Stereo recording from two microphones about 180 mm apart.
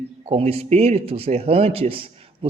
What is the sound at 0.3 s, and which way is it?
Speech, 35° right (ahead or behind).